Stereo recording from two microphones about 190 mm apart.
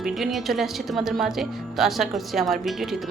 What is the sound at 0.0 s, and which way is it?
Speech, centre (ahead or behind).